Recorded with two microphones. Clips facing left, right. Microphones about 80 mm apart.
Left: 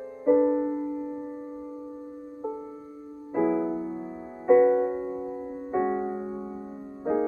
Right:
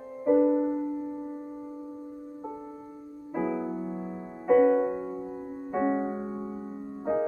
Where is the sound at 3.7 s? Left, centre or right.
Centre.